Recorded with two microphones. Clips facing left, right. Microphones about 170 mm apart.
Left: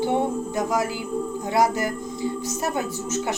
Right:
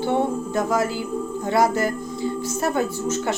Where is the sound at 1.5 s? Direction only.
15° left (ahead or behind).